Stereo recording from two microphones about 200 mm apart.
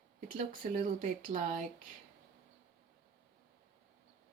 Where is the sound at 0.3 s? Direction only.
40° right (ahead or behind).